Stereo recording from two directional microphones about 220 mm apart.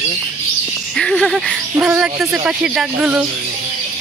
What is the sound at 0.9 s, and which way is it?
Speech, centre (ahead or behind).